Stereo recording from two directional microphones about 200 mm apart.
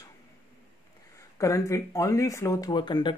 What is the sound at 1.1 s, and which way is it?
Speech, 15° left (ahead or behind).